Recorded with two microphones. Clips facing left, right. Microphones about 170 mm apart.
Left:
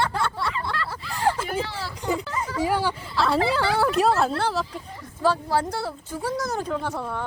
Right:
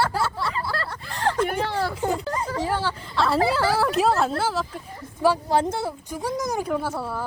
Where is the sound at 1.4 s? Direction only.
55° right (ahead or behind).